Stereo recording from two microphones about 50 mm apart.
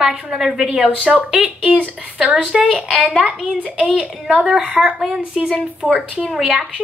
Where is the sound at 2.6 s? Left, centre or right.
Centre.